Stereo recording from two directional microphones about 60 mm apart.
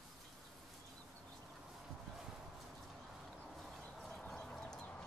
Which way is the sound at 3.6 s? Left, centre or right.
Centre.